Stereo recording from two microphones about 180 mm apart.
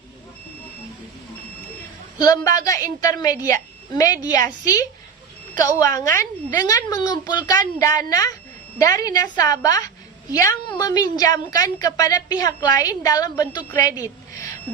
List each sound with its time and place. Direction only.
2.1 s a woman's voice: 20° left (ahead or behind)
10.8 s a woman's voice: 20° left (ahead or behind)